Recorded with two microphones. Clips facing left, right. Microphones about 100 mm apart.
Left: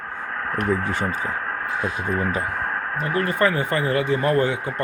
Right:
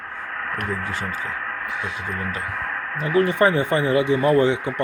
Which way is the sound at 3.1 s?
20° right (ahead or behind).